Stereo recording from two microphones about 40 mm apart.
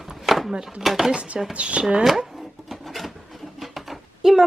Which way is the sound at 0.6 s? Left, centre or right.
Centre.